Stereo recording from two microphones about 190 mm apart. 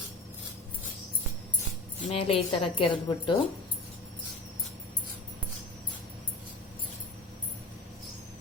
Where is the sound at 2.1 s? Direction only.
30° left (ahead or behind).